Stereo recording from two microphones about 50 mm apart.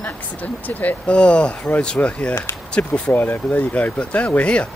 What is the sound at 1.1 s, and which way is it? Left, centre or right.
Speech, left.